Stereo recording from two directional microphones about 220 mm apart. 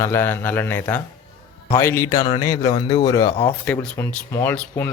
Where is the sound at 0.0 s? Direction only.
10° left (ahead or behind).